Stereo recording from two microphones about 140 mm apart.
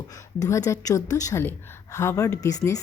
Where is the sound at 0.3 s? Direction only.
25° left (ahead or behind).